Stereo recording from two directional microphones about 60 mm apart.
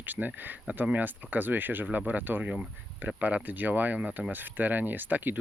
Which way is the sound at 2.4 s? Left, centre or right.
Centre.